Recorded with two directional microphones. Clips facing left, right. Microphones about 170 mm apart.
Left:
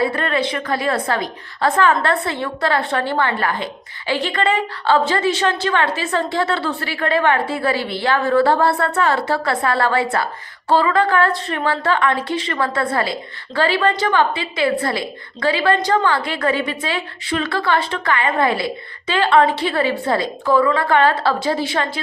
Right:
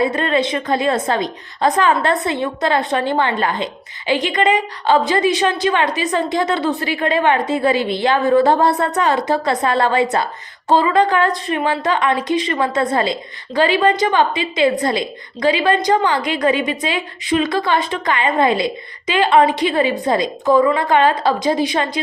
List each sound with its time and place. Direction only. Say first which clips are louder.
0.0 s a woman's voice: right 2 dB; 20° right (ahead or behind)